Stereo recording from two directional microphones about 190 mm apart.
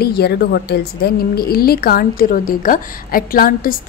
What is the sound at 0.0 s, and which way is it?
A woman's voice, 55° left (ahead or behind).